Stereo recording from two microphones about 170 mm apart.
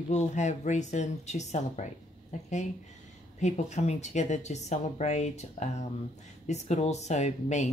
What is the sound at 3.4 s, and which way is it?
Speech, 45° left (ahead or behind).